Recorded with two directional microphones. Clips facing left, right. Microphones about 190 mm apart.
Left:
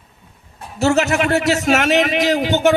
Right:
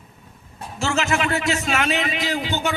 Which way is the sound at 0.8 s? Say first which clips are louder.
Left 7 dB; 40° left (ahead or behind).